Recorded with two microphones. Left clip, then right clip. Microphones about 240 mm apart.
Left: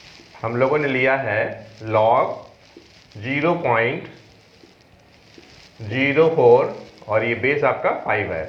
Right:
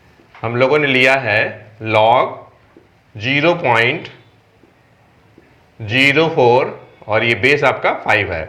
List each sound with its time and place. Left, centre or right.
0.4 s speech: right
5.9 s speech: right